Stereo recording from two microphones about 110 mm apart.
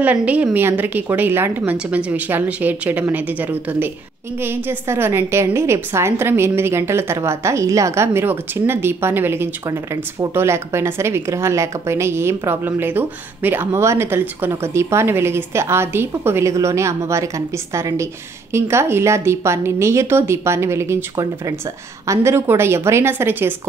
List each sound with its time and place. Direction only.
0.0 s a woman's voice: 15° right (ahead or behind)